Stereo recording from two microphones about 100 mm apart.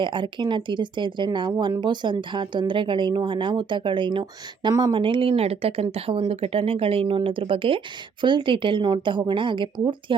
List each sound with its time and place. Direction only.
0.0 s speech: 55° right (ahead or behind)
5.4 s speech: 80° right; by 10.2 s 55° right (ahead or behind)